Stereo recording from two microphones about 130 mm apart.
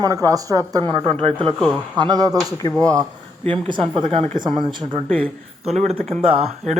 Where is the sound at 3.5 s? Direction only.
40° right (ahead or behind).